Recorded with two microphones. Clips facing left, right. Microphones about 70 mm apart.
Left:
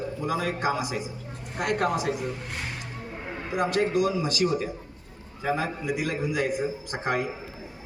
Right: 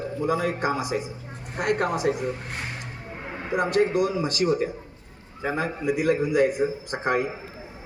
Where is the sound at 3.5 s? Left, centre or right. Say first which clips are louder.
Right 3 dB; right.